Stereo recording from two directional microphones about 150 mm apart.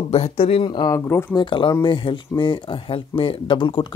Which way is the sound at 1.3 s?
35° left (ahead or behind).